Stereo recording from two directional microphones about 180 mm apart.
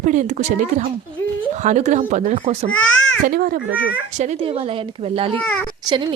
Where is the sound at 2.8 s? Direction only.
90° left.